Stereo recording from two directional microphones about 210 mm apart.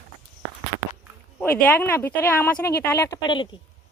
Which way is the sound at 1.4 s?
10° left (ahead or behind).